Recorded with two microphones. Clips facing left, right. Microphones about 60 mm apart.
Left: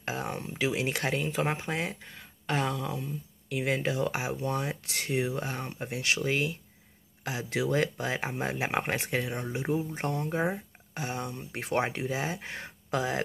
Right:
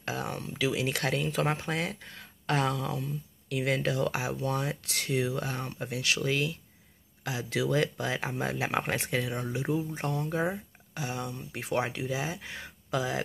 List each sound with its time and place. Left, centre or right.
0.0 s speech: left
0.9 s speech: centre
3.4 s speech: centre; by 13.2 s left